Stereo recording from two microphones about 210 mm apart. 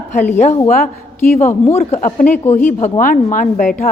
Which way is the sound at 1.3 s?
30° left (ahead or behind).